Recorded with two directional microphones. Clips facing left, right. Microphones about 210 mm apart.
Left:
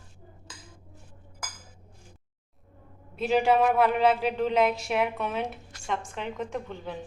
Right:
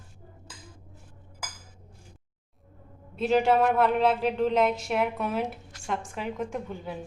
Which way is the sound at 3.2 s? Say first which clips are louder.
Even; centre (ahead or behind).